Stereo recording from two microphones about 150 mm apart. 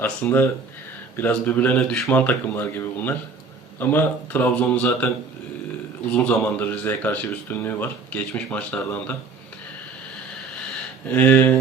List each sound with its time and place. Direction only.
0.0 s speech: 15° left (ahead or behind)
6.1 s speech: 10° left (ahead or behind)
11.1 s speech: 10° left (ahead or behind)